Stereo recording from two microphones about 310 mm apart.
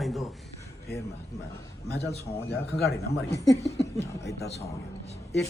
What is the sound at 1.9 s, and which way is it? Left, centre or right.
Speech, left.